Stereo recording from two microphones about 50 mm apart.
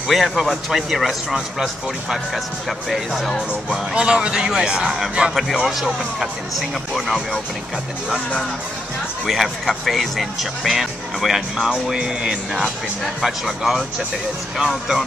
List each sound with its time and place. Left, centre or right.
0.1 s speech: centre
3.3 s speech: centre
9.2 s speech: centre
12.5 s speech: centre